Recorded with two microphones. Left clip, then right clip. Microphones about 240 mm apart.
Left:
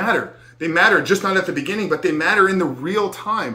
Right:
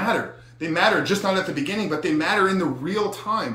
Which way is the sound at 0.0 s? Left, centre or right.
Centre.